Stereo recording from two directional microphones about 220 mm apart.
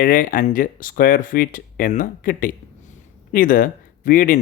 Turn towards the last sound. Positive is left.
turn(degrees=35)  # may be behind; listen again after turning